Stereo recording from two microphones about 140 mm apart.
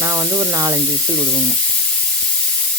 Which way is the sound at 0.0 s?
25° right (ahead or behind).